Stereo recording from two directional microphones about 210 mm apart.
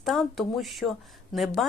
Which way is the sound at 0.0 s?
Centre (ahead or behind).